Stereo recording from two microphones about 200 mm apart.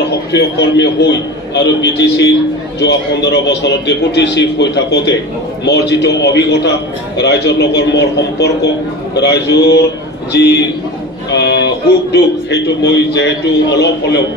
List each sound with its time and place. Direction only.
0.3 s a man's voice: 60° left (ahead or behind)